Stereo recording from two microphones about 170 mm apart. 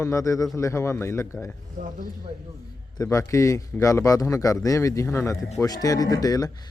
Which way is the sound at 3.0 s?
15° left (ahead or behind).